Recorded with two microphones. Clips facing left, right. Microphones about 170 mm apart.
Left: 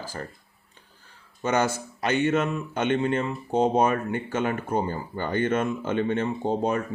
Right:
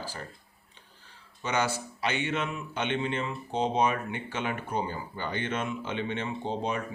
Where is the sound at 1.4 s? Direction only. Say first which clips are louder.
Left 5 dB; 50° left (ahead or behind).